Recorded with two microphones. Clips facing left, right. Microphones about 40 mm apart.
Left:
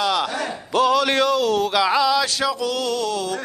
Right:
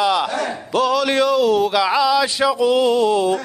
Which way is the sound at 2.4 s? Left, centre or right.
Centre.